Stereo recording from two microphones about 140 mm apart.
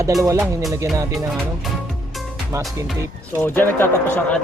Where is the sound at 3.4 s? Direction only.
15° left (ahead or behind).